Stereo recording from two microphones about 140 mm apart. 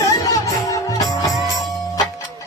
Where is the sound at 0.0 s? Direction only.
25° left (ahead or behind).